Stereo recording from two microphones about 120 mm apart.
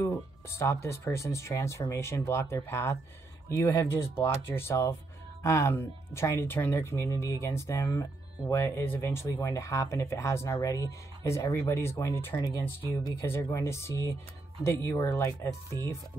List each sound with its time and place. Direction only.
0.5 s speech: 25° left (ahead or behind)
12.4 s speech: 30° left (ahead or behind)